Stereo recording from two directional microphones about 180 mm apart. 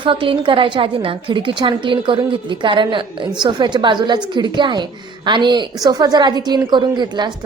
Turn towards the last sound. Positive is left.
turn(degrees=-25)  # may be behind; listen again after turning